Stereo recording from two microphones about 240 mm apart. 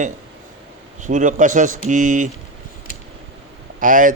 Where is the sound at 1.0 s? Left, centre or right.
Right.